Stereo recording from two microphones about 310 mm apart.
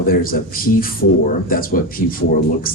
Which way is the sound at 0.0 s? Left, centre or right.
Left.